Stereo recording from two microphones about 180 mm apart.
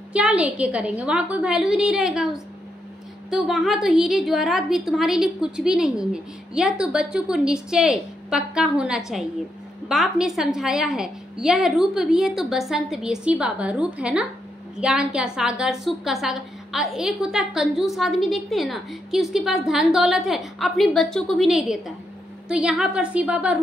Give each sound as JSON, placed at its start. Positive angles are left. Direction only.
{"t": 0.1, "sound": "a woman's voice", "side_deg": -5}